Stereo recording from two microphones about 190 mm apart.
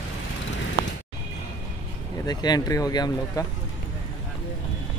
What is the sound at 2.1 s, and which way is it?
Speech, 20° left (ahead or behind).